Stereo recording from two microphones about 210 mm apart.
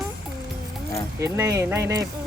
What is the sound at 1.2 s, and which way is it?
Speech, 15° right (ahead or behind).